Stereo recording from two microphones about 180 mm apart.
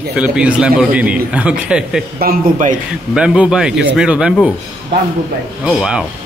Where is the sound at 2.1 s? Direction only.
55° right (ahead or behind).